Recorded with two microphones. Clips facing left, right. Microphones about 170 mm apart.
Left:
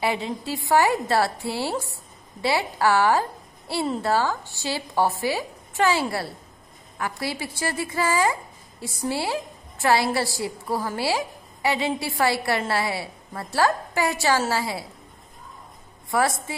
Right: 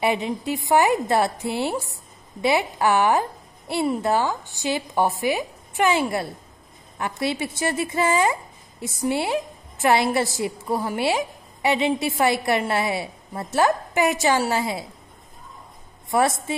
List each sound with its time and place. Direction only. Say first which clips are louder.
0.0 s a woman's voice: right 3 dB; 20° right (ahead or behind)
16.1 s a woman's voice: right 2 dB; 20° right (ahead or behind)